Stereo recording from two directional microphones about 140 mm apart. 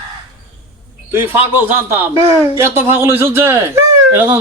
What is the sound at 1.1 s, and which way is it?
Speech, 15° right (ahead or behind).